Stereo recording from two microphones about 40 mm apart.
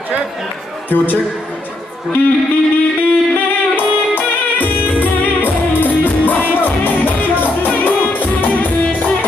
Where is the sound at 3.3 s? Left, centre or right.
Left.